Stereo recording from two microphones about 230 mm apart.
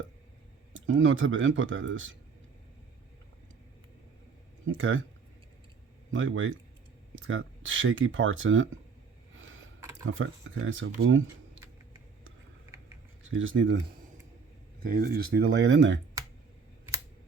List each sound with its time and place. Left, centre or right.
0.7 s speech: right
4.6 s speech: right
6.1 s speech: right
10.1 s speech: right
13.3 s speech: right
14.8 s speech: right